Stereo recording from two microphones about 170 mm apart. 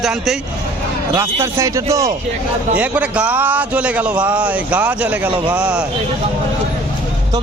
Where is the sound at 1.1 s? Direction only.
15° right (ahead or behind).